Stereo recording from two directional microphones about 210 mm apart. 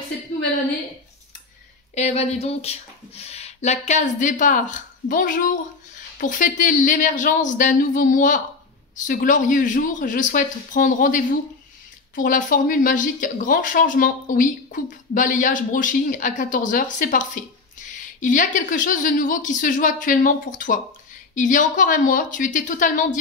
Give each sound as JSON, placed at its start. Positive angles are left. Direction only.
{"t": 2.0, "sound": "speech", "side_deg": 30}